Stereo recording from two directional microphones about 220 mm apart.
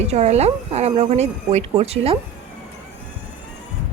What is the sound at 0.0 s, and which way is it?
Speech, 30° right (ahead or behind).